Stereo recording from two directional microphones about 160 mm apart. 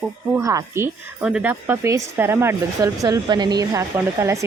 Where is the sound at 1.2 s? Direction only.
5° right (ahead or behind).